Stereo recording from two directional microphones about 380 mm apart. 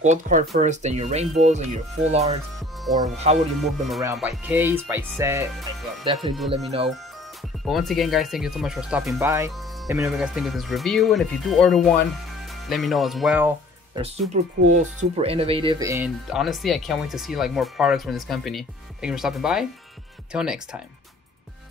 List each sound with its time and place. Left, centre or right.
0.0 s speech: centre
3.3 s speech: centre
3.6 s speech: centre
7.6 s speech: centre
13.9 s speech: centre